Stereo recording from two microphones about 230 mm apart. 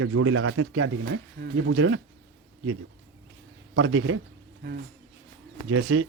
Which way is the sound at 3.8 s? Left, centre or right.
Right.